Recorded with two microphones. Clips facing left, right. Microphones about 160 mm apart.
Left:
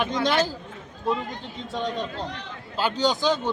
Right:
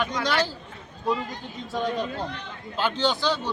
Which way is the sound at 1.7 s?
5° right (ahead or behind).